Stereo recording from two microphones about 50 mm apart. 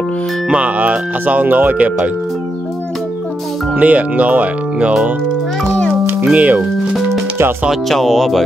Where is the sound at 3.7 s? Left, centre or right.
Right.